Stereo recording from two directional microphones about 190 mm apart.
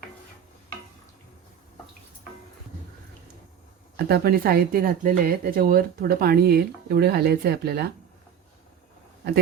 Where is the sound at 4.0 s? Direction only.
55° right (ahead or behind).